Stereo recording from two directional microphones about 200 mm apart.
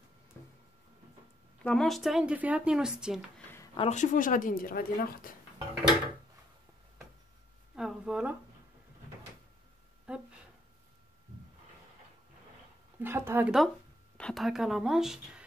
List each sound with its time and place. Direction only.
1.6 s speech: 5° left (ahead or behind)
3.7 s speech: 35° left (ahead or behind); by 5.3 s 50° left (ahead or behind)
7.7 s a sound: 5° right (ahead or behind)
10.1 s speech: 5° right (ahead or behind)
13.0 s speech: 10° right (ahead or behind)